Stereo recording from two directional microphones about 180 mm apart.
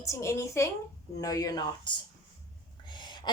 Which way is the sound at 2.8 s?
25° left (ahead or behind).